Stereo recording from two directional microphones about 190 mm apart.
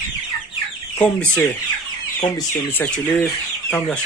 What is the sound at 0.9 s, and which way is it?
Speech, 10° left (ahead or behind).